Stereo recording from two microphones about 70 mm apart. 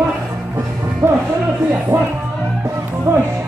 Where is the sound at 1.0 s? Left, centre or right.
Right.